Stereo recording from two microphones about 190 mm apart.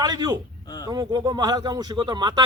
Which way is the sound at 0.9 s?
20° right (ahead or behind).